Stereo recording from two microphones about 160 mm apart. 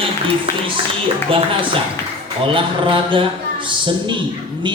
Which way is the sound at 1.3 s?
35° right (ahead or behind).